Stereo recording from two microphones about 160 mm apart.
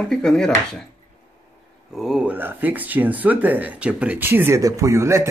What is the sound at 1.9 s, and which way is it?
Speech, 5° right (ahead or behind).